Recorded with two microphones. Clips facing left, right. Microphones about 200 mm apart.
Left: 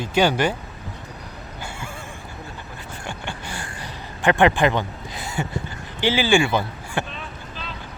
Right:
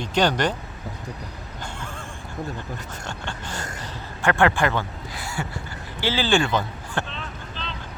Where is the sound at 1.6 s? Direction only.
10° left (ahead or behind).